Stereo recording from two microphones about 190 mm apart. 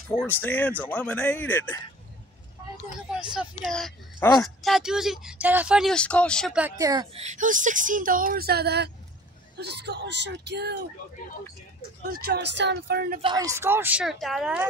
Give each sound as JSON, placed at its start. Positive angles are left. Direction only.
{"t": 0.2, "sound": "speech", "side_deg": 10}
{"t": 3.2, "sound": "speech", "side_deg": 0}
{"t": 6.6, "sound": "speech", "side_deg": -20}
{"t": 7.2, "sound": "speech", "side_deg": -40}
{"t": 12.1, "sound": "speech", "side_deg": -55}
{"t": 13.2, "sound": "speech", "side_deg": -20}